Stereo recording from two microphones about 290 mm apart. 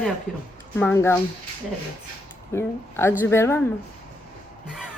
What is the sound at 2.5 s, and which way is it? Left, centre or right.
A woman's voice, centre.